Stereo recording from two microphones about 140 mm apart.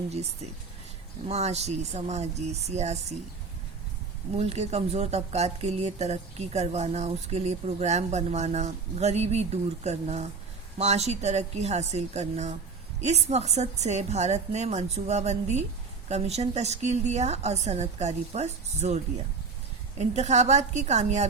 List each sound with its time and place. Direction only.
1.3 s speech: 50° right (ahead or behind)
4.4 s speech: 50° right (ahead or behind)
20.0 s speech: 55° right (ahead or behind)